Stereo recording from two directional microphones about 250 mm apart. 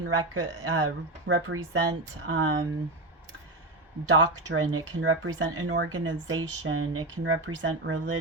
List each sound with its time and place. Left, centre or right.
0.0 s speech: right
4.1 s speech: right